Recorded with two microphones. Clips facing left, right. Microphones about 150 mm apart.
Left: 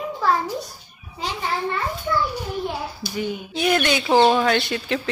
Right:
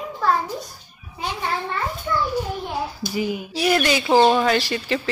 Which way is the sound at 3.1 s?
5° right (ahead or behind).